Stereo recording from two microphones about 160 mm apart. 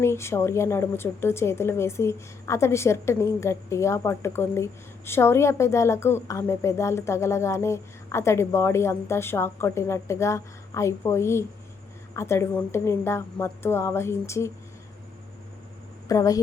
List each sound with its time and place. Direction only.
0.0 s a woman's voice: 15° left (ahead or behind)
16.0 s a woman's voice: 20° left (ahead or behind)